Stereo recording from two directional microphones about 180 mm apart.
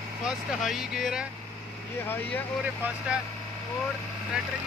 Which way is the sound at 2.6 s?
10° right (ahead or behind).